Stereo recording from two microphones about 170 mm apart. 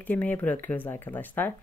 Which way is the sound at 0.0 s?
10° left (ahead or behind).